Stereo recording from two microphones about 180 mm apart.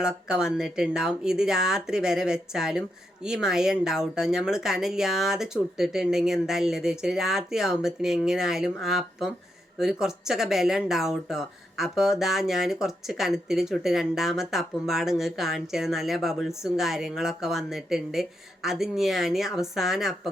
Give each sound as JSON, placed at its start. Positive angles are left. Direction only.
{"t": 0.0, "sound": "speech", "side_deg": -5}